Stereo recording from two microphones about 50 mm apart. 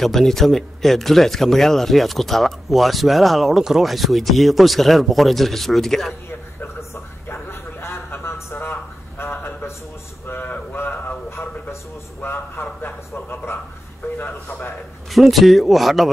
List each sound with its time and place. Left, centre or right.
0.0 s speech: centre
6.6 s a sound: left
12.2 s a man's voice: left
15.0 s speech: centre